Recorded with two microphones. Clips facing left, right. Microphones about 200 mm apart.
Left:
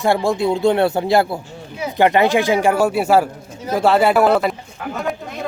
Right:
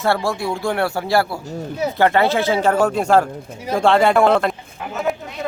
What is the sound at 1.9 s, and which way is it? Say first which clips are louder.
Speech: left 3 dB; 15° left (ahead or behind).